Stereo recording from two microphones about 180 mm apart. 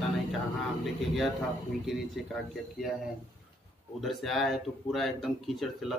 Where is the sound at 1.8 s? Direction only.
Centre (ahead or behind).